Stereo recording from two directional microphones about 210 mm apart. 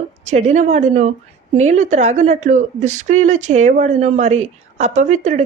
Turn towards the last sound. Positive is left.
turn(degrees=-35)  # may be behind; listen again after turning